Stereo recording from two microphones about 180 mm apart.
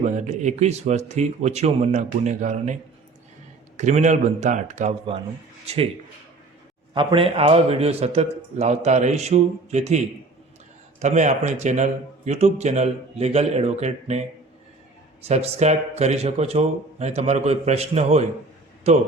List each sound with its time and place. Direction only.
0.0 s a man's voice: 40° right (ahead or behind)
3.8 s a man's voice: 40° right (ahead or behind)
6.9 s a man's voice: 25° right (ahead or behind)
11.0 s a man's voice: 40° right (ahead or behind)